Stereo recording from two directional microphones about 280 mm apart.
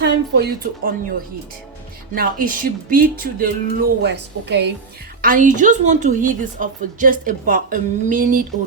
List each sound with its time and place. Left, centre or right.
0.0 s speech: right
2.1 s a woman's voice: right